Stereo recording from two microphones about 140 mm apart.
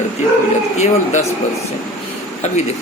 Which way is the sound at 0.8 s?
55° left (ahead or behind).